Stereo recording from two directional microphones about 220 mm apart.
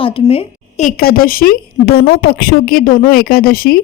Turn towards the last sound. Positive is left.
turn(degrees=40)  # may be behind; listen again after turning